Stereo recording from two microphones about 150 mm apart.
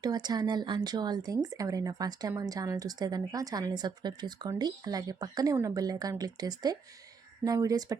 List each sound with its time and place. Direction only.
0.0 s speech: 25° right (ahead or behind)